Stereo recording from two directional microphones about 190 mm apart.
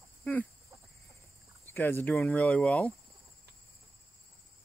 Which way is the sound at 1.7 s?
10° left (ahead or behind).